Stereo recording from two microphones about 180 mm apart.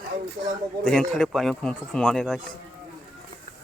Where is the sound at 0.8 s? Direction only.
5° left (ahead or behind).